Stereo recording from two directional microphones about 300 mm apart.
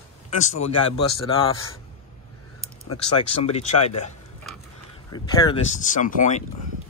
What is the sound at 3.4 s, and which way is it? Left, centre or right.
Speech, centre.